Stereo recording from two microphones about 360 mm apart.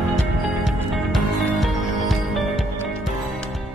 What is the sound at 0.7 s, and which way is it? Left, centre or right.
Music, centre.